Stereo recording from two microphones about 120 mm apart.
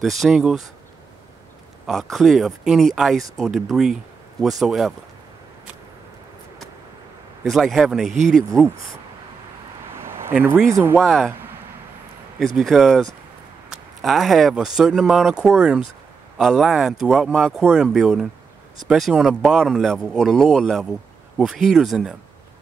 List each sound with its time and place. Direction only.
0.0 s speech: centre (ahead or behind)
1.9 s speech: centre (ahead or behind)
7.5 s speech: centre (ahead or behind)
9.9 s a sound: 20° right (ahead or behind)
10.4 s speech: 20° right (ahead or behind)
11.0 s speech: 5° left (ahead or behind)
12.5 s speech: centre (ahead or behind)